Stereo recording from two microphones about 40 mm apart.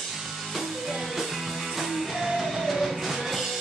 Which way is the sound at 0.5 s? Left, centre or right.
Centre.